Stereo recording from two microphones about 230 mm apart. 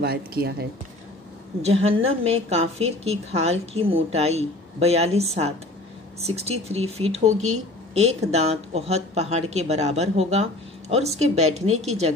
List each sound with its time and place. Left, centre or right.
0.0 s speech: right
1.6 s speech: right